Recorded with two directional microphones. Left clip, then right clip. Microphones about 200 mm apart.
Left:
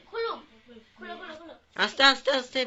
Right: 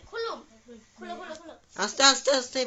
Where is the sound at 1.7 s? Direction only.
5° right (ahead or behind).